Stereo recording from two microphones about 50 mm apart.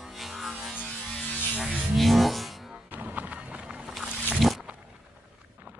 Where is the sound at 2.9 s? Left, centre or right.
Right.